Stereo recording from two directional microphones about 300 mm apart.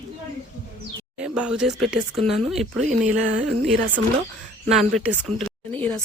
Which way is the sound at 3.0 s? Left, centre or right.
Right.